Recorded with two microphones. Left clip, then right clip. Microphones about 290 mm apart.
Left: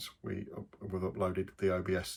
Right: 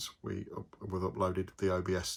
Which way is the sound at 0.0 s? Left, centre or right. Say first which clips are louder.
Right 1 dB; centre.